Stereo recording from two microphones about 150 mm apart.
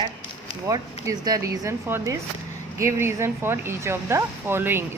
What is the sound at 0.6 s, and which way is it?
A woman's voice, 25° right (ahead or behind).